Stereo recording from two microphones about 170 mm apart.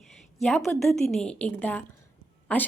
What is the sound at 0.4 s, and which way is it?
A woman's voice, centre (ahead or behind).